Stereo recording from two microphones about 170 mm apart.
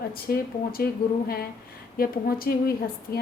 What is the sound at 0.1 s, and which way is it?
Speech, 65° left (ahead or behind).